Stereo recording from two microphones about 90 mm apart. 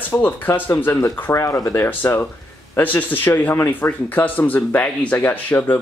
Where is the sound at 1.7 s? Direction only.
25° left (ahead or behind).